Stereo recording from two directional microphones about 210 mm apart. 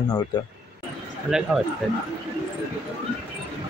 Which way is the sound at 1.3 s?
Centre (ahead or behind).